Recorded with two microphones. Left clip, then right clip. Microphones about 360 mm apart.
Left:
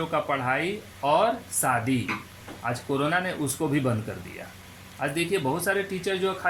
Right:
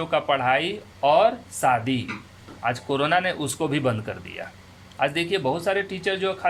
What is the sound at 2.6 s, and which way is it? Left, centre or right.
Speech, right.